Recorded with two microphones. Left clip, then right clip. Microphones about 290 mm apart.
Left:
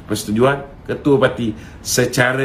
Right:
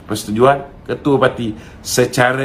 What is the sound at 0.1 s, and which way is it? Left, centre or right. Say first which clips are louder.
A man's voice: right 3 dB; centre.